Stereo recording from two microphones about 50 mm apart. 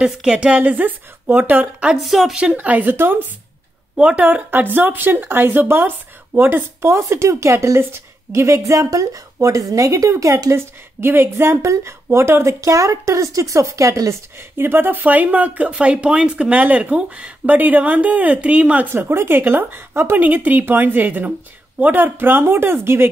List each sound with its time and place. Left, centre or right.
0.0 s a woman's voice: centre
0.6 s speech: right
2.0 s a woman's voice: centre
2.5 s speech: right
2.9 s speech: right
3.9 s speech: right
4.5 s speech: right
6.9 s a woman's voice: right
11.7 s a woman's voice: right
14.6 s speech: right
18.9 s speech: right